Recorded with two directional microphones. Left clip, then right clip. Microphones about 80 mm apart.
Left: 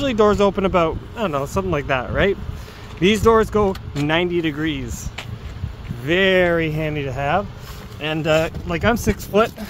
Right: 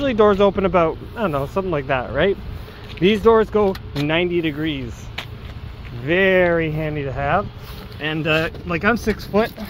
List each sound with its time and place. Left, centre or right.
0.0 s speech: centre
6.0 s speech: centre
6.8 s speech: left
7.1 s speech: centre
8.0 s speech: left; by 8.9 s centre
8.9 s speech: centre
9.3 s speech: centre